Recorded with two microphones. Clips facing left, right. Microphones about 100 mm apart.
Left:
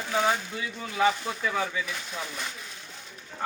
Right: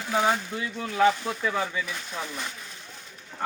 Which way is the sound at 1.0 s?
Centre (ahead or behind).